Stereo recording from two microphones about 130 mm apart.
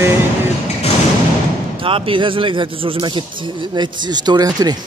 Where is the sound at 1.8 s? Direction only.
45° right (ahead or behind).